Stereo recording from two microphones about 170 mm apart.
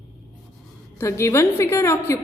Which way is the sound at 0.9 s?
15° left (ahead or behind).